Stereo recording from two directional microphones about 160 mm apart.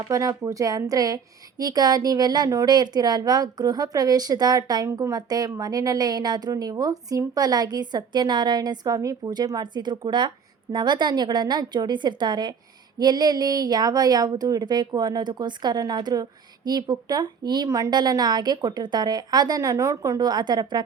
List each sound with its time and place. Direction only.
0.1 s a woman's voice: 20° right (ahead or behind)